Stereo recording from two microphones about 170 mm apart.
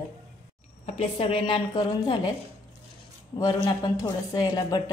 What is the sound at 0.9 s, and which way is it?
Speech, 40° left (ahead or behind).